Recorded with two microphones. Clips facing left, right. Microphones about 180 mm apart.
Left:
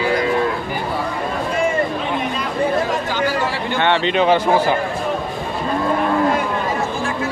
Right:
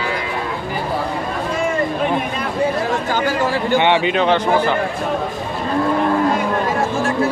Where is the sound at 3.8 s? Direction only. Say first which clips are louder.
Left 1 dB; 10° right (ahead or behind).